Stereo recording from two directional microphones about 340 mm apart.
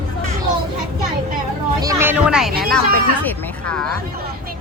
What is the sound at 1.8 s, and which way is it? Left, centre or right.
Speech, centre.